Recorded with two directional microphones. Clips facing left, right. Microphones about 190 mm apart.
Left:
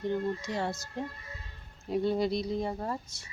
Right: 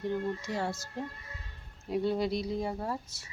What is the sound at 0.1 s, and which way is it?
Speech, 5° right (ahead or behind).